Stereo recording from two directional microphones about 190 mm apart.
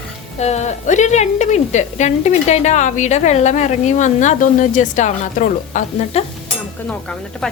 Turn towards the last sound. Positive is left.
turn(degrees=5)  # may be behind; listen again after turning